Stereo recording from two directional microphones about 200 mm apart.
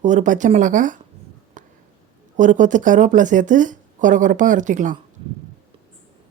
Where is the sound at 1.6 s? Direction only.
40° right (ahead or behind).